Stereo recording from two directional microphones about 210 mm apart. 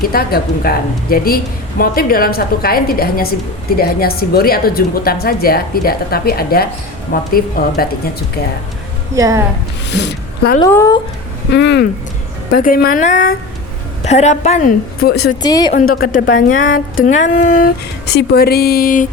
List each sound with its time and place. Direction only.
0.0 s a woman's voice: 45° left (ahead or behind)
9.1 s speech: 15° right (ahead or behind)
9.9 s speech: 55° left (ahead or behind)
10.7 s speech: 10° left (ahead or behind)
11.5 s a woman's voice: 55° left (ahead or behind)
12.5 s speech: 45° left (ahead or behind)
15.0 s a woman's voice: 50° left (ahead or behind)
15.4 s a woman's voice: 20° left (ahead or behind)
15.7 s speech: 40° left (ahead or behind)
18.0 s a woman's voice: 50° left (ahead or behind)